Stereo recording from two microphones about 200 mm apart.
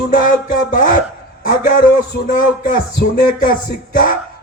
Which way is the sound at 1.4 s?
45° left (ahead or behind).